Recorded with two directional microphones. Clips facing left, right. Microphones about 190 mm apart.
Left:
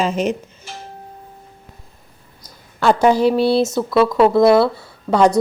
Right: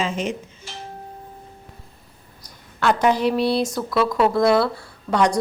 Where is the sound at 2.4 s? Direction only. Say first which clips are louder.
Left 3 dB; 30° left (ahead or behind).